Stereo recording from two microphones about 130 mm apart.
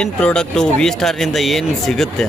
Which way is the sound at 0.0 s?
5° left (ahead or behind).